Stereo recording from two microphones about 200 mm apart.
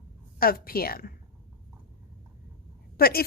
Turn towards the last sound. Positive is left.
turn(degrees=50)  # may be behind; listen again after turning